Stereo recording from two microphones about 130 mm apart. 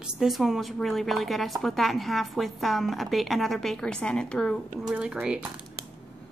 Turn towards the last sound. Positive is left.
turn(degrees=-10)  # may be behind; listen again after turning